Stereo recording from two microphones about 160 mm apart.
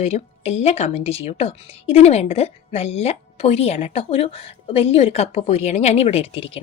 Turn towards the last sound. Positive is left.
turn(degrees=35)  # may be behind; listen again after turning